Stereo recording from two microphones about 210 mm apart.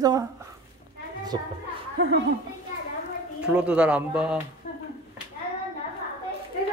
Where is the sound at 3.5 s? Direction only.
5° right (ahead or behind).